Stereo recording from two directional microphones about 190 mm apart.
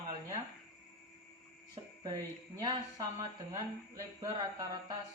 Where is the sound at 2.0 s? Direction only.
20° right (ahead or behind).